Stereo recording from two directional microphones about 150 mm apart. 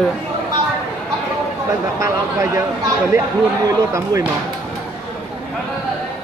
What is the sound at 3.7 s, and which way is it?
Speech, 20° right (ahead or behind).